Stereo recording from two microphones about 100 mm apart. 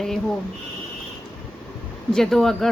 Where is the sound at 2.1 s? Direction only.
5° left (ahead or behind).